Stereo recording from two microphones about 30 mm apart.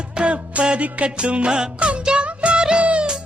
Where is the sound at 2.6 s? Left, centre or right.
Right.